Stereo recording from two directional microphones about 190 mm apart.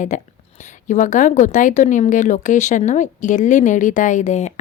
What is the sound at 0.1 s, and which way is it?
A woman's voice, 40° left (ahead or behind).